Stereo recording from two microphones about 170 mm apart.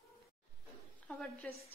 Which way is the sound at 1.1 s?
5° left (ahead or behind).